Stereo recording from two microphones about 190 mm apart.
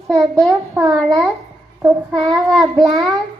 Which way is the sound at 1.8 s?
15° right (ahead or behind).